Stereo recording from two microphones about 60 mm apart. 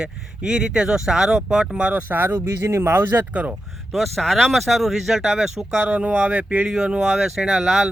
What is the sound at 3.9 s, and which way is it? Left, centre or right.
Speech, centre.